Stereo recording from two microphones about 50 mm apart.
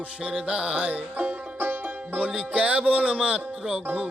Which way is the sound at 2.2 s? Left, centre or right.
Right.